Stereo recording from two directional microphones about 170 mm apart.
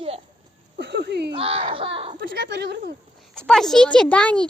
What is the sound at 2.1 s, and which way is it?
Speech, 90° right.